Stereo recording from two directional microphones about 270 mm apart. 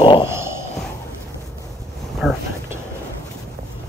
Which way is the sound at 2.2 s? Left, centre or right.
Centre.